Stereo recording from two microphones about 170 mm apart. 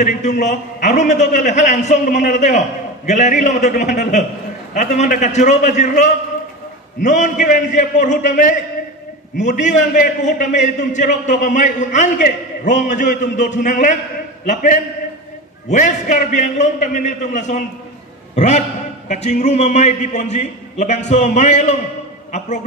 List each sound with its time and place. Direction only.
0.0 s a man's voice: 45° left (ahead or behind)